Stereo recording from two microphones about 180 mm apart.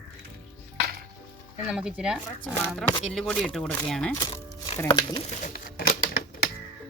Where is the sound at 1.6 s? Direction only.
5° right (ahead or behind).